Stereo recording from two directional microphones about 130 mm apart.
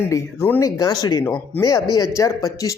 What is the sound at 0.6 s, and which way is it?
Speech, 30° left (ahead or behind).